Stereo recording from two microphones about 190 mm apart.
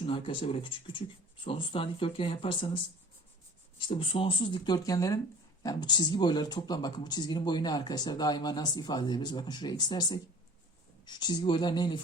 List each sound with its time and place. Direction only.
0.0 s speech: 25° left (ahead or behind)
3.8 s speech: 25° left (ahead or behind)